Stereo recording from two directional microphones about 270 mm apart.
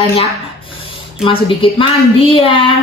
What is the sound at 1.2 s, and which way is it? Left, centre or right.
A woman's voice, centre.